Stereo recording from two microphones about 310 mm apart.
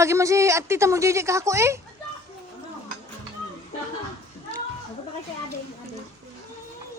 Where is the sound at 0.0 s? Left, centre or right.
Centre.